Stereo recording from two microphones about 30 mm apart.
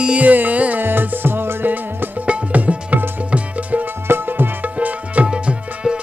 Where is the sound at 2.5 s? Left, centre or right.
Right.